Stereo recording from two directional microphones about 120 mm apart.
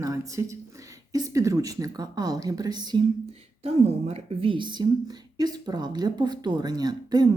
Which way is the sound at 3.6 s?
55° right (ahead or behind).